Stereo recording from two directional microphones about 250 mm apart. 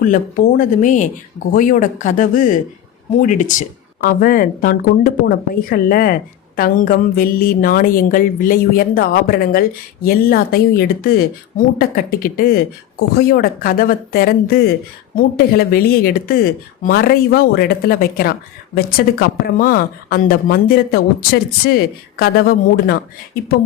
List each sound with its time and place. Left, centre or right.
0.0 s a woman's voice: left